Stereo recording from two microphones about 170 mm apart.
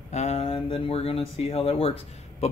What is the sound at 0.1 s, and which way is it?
Speech, 40° left (ahead or behind).